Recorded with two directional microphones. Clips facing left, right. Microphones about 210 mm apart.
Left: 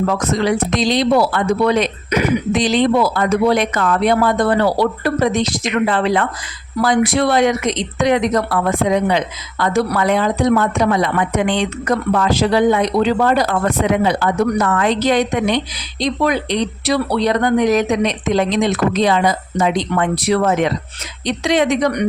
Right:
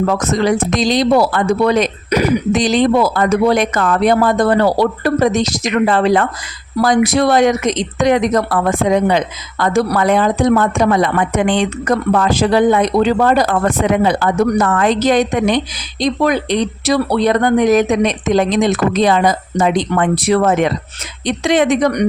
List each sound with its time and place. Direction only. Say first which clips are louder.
0.2 s speech: right 2 dB; 45° right (ahead or behind)